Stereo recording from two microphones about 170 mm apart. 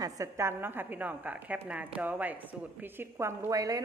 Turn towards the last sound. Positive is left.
turn(degrees=-20)  # may be behind; listen again after turning